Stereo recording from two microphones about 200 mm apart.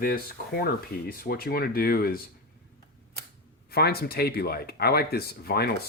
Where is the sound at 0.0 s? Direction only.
50° left (ahead or behind).